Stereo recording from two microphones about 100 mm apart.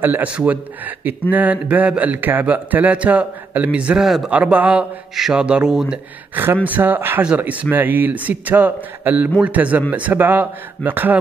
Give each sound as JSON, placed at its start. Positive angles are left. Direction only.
{"t": 0.0, "sound": "speech", "side_deg": -15}
{"t": 6.3, "sound": "speech", "side_deg": -20}